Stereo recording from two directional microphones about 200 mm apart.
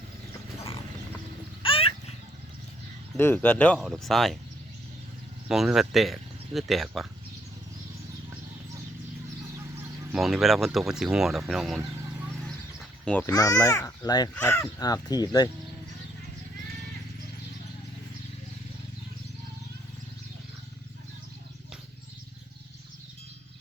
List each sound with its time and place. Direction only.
1.6 s a sound: 25° left (ahead or behind)
3.2 s speech: 10° left (ahead or behind)
5.5 s speech: centre (ahead or behind)
10.1 s speech: centre (ahead or behind)
13.1 s speech: 10° left (ahead or behind)